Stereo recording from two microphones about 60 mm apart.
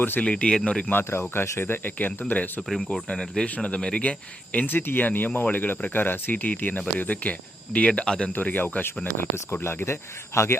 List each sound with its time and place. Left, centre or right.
0.2 s speech: centre
0.9 s speech: left
2.6 s speech: centre
3.4 s speech: left
4.6 s speech: left; by 8.3 s centre
8.3 s speech: left
9.3 s speech: left